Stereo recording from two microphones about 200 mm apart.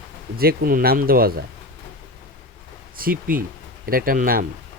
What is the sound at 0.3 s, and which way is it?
Speech, 50° right (ahead or behind).